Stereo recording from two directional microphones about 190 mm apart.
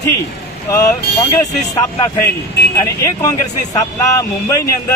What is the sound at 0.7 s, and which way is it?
Speech, 15° left (ahead or behind).